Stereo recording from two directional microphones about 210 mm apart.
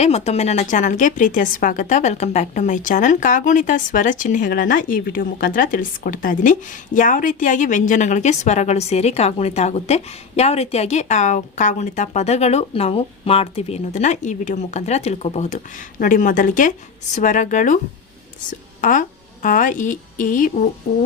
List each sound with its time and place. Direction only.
0.0 s a woman's voice: 30° left (ahead or behind)
18.8 s a woman's voice: 40° left (ahead or behind)